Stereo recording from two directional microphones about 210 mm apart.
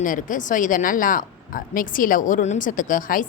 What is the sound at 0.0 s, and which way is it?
Speech, 40° left (ahead or behind).